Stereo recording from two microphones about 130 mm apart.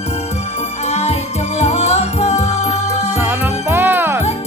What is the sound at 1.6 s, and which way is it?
Music, 55° left (ahead or behind).